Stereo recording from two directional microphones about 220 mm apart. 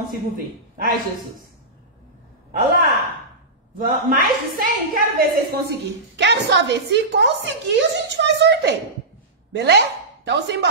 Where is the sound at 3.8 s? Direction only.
40° right (ahead or behind).